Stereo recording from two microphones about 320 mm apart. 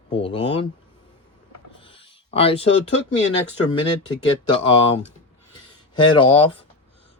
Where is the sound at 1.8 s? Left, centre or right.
Centre.